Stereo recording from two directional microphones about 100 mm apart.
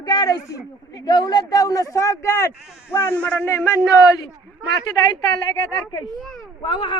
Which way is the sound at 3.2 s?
15° left (ahead or behind).